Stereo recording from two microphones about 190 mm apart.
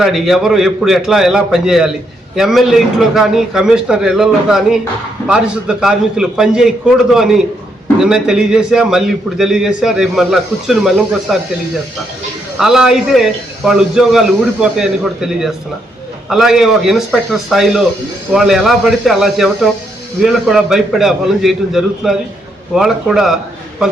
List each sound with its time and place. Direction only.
0.0 s a man's voice: centre (ahead or behind)
12.5 s a man's voice: centre (ahead or behind)